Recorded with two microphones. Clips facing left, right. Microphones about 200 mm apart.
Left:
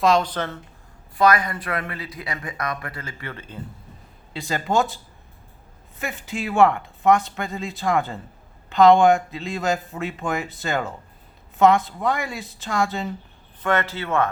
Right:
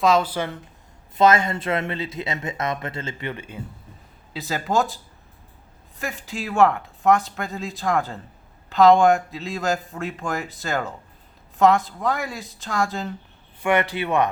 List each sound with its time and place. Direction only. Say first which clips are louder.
0.0 s speech: even; 5° right (ahead or behind)
1.1 s speech: right 2 dB; 25° right (ahead or behind)
4.3 s speech: left 1 dB; 5° right (ahead or behind)
6.0 s speech: left 1 dB; centre (ahead or behind)
13.6 s speech: right 2 dB; 15° right (ahead or behind)